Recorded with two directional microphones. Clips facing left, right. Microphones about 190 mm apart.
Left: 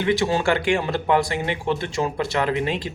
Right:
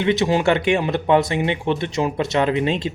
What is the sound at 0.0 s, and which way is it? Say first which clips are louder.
Speech: right 3 dB; 20° right (ahead or behind).